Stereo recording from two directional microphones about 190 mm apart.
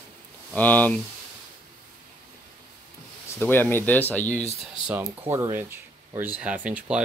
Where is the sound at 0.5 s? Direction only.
10° left (ahead or behind).